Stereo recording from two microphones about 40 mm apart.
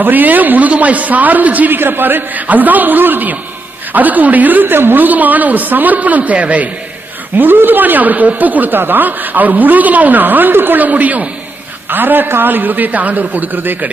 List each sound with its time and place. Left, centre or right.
0.0 s a woman's voice: right
1.8 s a man's voice: right
2.4 s speech: right
4.7 s a woman's voice: right
5.0 s speech: right
7.3 s speech: right
10.9 s a woman's voice: right
11.9 s speech: right